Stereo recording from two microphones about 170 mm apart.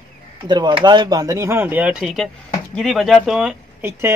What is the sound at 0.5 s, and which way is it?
Speech, 25° right (ahead or behind).